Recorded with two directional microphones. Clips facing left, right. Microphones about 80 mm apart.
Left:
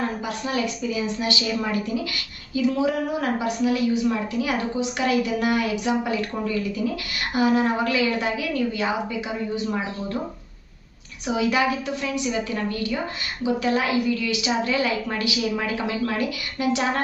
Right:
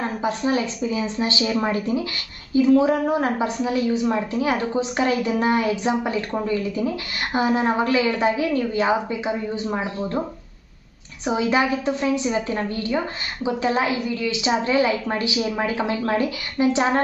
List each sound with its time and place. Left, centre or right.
0.2 s a woman's voice: right
11.2 s a woman's voice: right